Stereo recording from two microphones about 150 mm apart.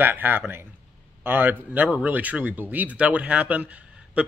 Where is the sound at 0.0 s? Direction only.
10° right (ahead or behind).